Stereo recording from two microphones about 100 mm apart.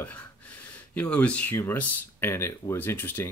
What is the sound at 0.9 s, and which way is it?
Speech, 15° left (ahead or behind).